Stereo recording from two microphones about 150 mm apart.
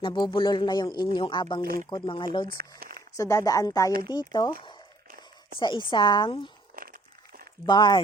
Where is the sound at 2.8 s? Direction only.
90° right.